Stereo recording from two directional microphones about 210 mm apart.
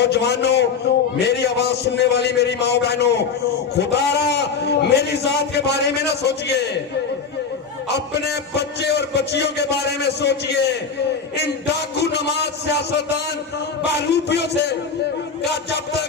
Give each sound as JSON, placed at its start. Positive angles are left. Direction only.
{"t": 0.0, "sound": "a man's voice", "side_deg": 50}
{"t": 7.9, "sound": "a man's voice", "side_deg": 55}